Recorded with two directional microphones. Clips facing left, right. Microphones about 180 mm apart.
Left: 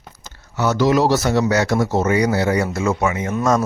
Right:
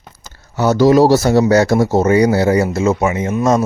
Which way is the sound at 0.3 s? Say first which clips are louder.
Right 5 dB; 35° right (ahead or behind).